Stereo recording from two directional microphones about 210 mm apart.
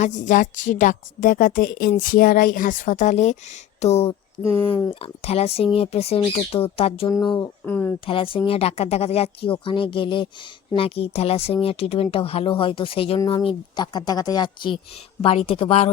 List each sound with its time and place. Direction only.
0.3 s a woman's voice: 35° left (ahead or behind); by 7.9 s 10° left (ahead or behind)
8.0 s speech: 25° left (ahead or behind)